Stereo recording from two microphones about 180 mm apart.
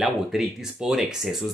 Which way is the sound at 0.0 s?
Centre (ahead or behind).